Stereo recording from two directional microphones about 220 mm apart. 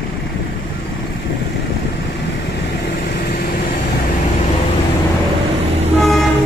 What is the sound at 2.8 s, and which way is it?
Vehicle, 50° left (ahead or behind).